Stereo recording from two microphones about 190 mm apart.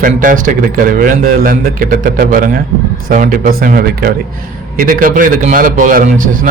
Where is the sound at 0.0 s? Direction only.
45° right (ahead or behind).